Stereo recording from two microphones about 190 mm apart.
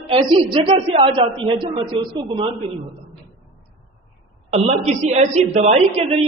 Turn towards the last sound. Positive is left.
turn(degrees=-35)  # may be behind; listen again after turning